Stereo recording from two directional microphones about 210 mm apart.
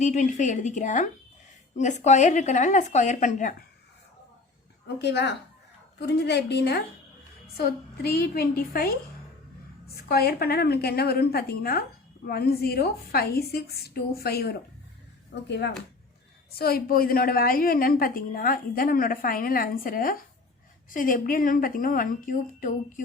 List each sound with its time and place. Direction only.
0.0 s speech: 35° left (ahead or behind)
4.9 s a woman's voice: 55° left (ahead or behind)
9.9 s a woman's voice: 45° left (ahead or behind)